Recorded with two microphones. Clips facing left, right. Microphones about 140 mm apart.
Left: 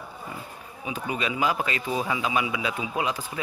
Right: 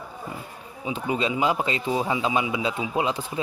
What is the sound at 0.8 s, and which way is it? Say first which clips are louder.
A man's voice: right 4 dB; 25° right (ahead or behind).